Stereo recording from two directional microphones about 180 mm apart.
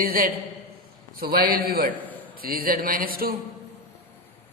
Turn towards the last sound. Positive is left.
turn(degrees=-55)  # may be behind; listen again after turning